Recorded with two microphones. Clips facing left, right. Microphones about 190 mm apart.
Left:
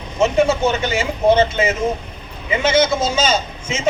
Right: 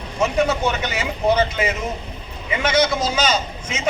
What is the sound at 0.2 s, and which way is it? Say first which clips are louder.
A man's voice: left 4 dB; 25° left (ahead or behind).